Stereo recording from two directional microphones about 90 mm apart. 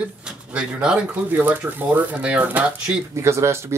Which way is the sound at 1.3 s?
20° right (ahead or behind).